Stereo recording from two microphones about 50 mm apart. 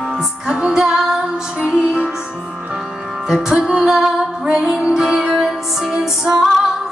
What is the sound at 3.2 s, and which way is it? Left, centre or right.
Music, centre.